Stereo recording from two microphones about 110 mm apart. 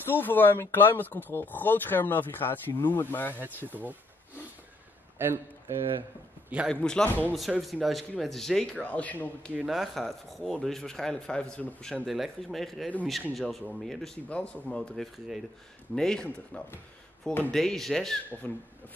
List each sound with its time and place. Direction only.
0.0 s speech: 20° left (ahead or behind)
3.3 s speech: 15° right (ahead or behind)
5.2 s speech: 20° right (ahead or behind)
6.7 s speech: 5° left (ahead or behind)
7.3 s speech: centre (ahead or behind); by 9.5 s 15° left (ahead or behind)
9.6 s speech: centre (ahead or behind)